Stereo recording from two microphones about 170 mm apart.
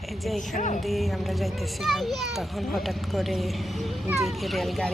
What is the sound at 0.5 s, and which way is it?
Speech, 50° left (ahead or behind).